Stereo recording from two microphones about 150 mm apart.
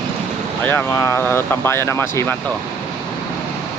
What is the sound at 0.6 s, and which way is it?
Speech, 15° left (ahead or behind).